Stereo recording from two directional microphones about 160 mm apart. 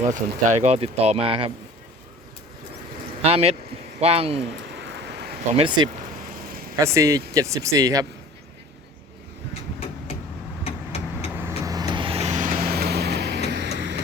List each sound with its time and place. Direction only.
0.0 s speech: 50° right (ahead or behind)
3.2 s speech: 40° right (ahead or behind)
5.0 s a sound: 90° right
5.5 s speech: 30° right (ahead or behind)
6.7 s speech: 20° right (ahead or behind)
10.6 s vehicle: 40° left (ahead or behind)
11.3 s vehicle: 20° right (ahead or behind); by 13.7 s 90° right